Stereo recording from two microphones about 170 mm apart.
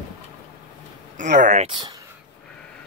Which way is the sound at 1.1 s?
45° right (ahead or behind).